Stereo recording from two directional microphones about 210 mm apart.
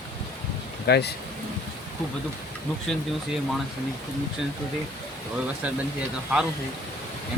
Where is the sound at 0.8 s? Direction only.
50° left (ahead or behind).